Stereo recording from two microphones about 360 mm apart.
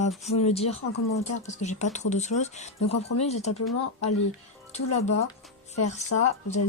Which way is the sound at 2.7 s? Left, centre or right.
Left.